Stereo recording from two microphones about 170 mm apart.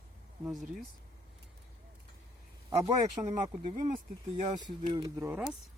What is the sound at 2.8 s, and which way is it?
Speech, 45° right (ahead or behind).